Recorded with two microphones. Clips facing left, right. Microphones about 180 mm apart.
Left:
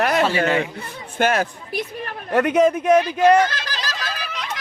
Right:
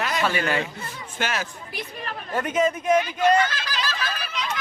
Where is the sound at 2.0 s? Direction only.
65° left (ahead or behind).